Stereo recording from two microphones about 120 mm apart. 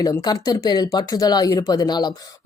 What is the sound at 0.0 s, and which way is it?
Speech, 35° left (ahead or behind).